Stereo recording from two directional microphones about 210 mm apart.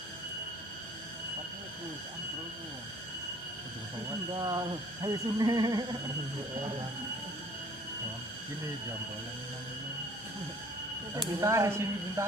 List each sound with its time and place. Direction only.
4.4 s music: 20° right (ahead or behind)
11.3 s speech: 15° right (ahead or behind)